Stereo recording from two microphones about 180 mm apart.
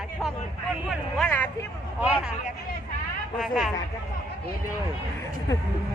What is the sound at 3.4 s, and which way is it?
Speech, centre (ahead or behind).